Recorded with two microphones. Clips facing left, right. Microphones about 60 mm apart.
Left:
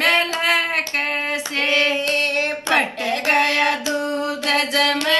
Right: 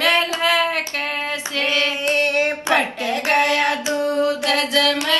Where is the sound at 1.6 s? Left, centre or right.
Left.